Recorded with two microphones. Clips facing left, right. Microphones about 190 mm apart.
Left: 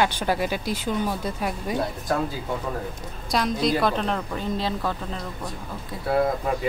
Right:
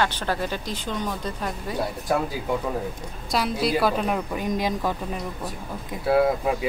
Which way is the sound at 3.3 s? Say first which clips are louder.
Left 1 dB; 5° right (ahead or behind).